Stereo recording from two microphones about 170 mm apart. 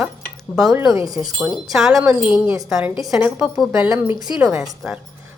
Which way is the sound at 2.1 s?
10° right (ahead or behind).